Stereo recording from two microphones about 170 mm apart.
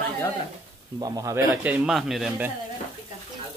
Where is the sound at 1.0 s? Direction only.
20° right (ahead or behind); by 2.3 s centre (ahead or behind).